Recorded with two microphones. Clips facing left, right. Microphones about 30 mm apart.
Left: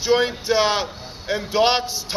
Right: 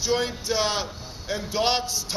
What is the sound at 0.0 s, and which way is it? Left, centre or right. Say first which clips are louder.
Speech: left 6 dB; left.